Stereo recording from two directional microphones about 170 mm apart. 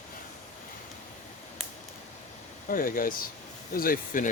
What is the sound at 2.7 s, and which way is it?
Speech, 55° left (ahead or behind).